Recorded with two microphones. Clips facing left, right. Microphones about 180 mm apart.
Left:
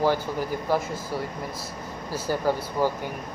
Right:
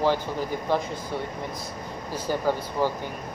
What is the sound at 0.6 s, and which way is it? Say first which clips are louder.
Speech: even; 5° left (ahead or behind).